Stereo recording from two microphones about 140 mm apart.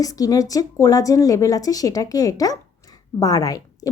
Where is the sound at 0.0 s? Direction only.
25° left (ahead or behind).